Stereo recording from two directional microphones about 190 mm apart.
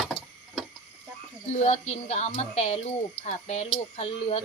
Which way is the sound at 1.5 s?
35° left (ahead or behind).